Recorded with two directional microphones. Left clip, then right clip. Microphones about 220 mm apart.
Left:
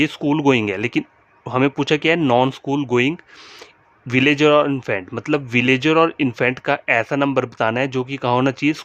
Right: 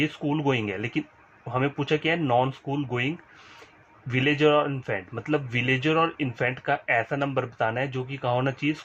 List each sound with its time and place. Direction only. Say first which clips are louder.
0.0 s speech: left 8 dB; 50° left (ahead or behind)
4.1 s speech: left 7 dB; 50° left (ahead or behind)